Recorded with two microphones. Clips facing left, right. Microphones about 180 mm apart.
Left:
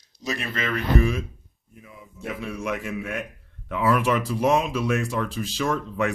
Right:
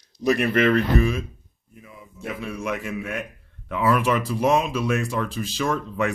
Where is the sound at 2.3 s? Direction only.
Centre (ahead or behind).